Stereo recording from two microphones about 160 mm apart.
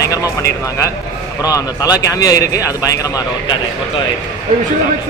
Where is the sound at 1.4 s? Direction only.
20° left (ahead or behind).